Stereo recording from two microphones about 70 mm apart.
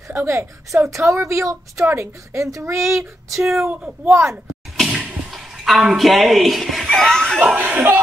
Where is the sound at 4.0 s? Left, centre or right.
Right.